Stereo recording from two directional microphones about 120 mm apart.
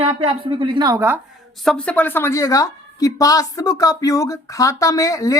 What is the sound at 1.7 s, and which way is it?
A woman's voice, 10° left (ahead or behind).